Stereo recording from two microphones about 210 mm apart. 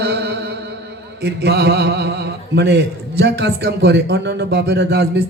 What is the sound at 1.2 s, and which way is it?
A man's voice, 50° right (ahead or behind).